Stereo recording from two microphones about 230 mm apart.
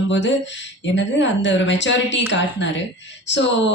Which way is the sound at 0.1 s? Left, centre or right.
Left.